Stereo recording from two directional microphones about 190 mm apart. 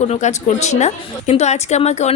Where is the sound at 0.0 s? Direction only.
35° left (ahead or behind).